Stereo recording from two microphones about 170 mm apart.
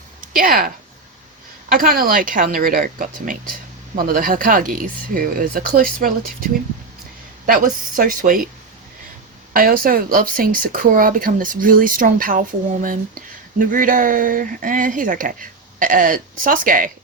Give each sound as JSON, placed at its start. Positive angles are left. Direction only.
{"t": 0.3, "sound": "speech", "side_deg": -55}
{"t": 1.7, "sound": "speech", "side_deg": -55}
{"t": 7.4, "sound": "speech", "side_deg": -55}
{"t": 9.5, "sound": "speech", "side_deg": -55}